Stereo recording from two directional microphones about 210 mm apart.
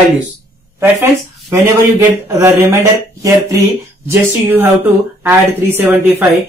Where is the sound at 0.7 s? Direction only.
10° right (ahead or behind).